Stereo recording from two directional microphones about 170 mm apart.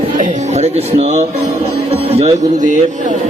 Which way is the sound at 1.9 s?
35° right (ahead or behind).